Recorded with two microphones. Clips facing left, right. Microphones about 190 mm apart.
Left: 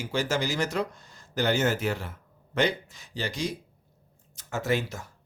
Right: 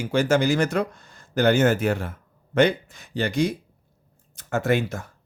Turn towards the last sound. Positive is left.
turn(degrees=-55)  # may be behind; listen again after turning